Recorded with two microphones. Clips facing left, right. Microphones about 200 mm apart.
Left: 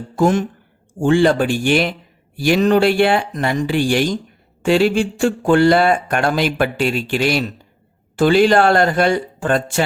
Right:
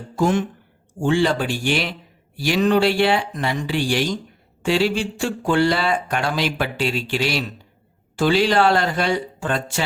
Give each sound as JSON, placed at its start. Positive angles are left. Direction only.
{"t": 0.2, "sound": "speech", "side_deg": 45}